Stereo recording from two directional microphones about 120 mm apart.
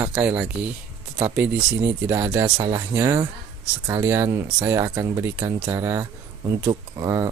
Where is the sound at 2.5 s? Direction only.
35° right (ahead or behind).